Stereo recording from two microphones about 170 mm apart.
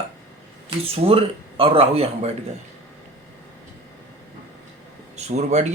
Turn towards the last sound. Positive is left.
turn(degrees=-40)  # may be behind; listen again after turning